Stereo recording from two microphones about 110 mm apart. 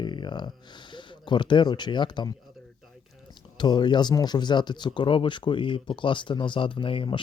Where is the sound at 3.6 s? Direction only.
40° left (ahead or behind).